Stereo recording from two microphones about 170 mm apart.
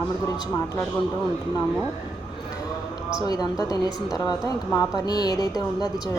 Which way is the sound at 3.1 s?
25° left (ahead or behind).